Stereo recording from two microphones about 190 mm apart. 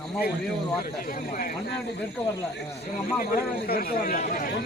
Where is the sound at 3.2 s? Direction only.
50° left (ahead or behind).